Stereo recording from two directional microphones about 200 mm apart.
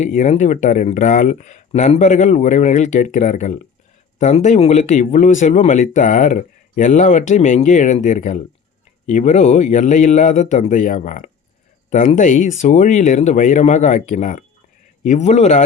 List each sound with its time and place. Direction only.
0.0 s speech: 35° left (ahead or behind)